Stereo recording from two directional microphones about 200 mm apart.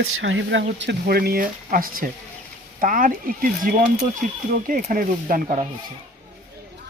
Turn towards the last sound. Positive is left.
turn(degrees=-40)  # may be behind; listen again after turning